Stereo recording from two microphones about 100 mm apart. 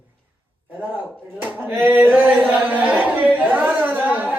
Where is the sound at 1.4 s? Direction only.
20° right (ahead or behind).